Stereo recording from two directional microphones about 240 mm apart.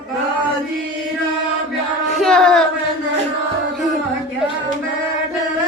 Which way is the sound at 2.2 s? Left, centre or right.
Centre.